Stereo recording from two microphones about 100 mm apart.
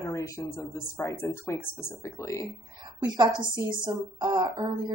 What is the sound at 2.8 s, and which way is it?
A woman's voice, 45° right (ahead or behind).